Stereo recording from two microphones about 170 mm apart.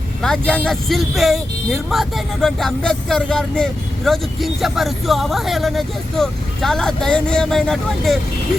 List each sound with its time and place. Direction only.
0.2 s speech: 5° left (ahead or behind)